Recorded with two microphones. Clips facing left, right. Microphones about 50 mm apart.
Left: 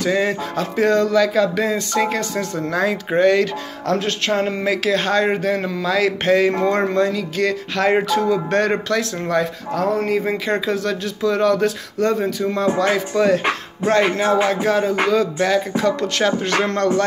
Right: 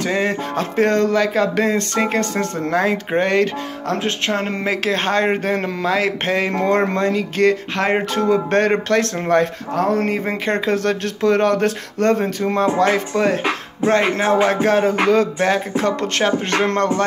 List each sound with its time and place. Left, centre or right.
0.0 s music: right
1.6 s speech: right
2.0 s music: right
5.9 s speech: right
7.0 s music: right
8.1 s speech: right
12.7 s music: right